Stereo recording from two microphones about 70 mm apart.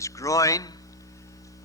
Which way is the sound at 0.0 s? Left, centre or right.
Left.